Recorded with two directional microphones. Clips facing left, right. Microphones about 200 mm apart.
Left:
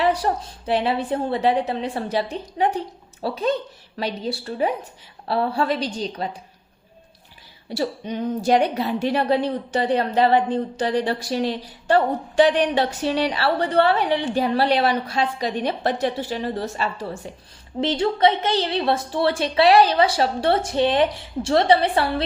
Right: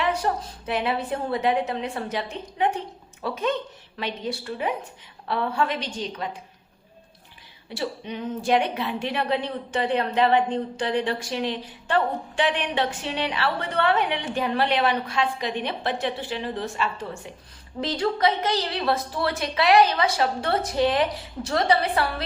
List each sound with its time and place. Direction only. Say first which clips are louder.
0.0 s a woman's voice: left 4 dB; 35° left (ahead or behind)
7.7 s a woman's voice: left 5 dB; 40° left (ahead or behind)
17.7 s a woman's voice: left 4 dB; 25° left (ahead or behind)